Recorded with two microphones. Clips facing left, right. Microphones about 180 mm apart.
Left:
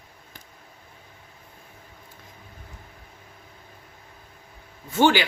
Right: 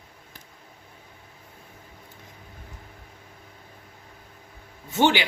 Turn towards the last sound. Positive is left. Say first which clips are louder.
# left 2 dB
turn(degrees=-20)  # may be behind; listen again after turning